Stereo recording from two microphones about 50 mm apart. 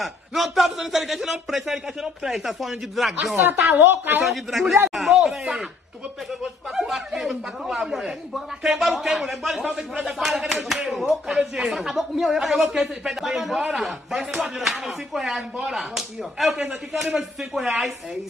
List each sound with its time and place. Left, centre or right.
0.0 s a man's voice: centre
3.7 s speech: right
4.2 s a man's voice: centre
6.7 s a man's voice: centre